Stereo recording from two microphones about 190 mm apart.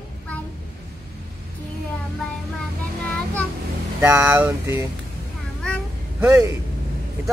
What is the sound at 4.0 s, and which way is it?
Speech, 15° right (ahead or behind).